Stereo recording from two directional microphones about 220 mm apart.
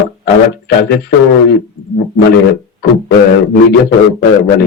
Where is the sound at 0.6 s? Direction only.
50° left (ahead or behind).